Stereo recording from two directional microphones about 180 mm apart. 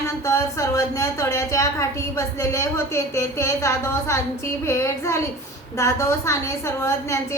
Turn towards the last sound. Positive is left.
turn(degrees=15)  # may be behind; listen again after turning